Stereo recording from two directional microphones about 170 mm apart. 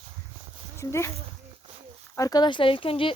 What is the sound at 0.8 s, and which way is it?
Speech, 15° left (ahead or behind).